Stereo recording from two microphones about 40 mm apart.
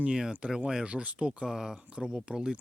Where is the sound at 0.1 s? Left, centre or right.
Centre.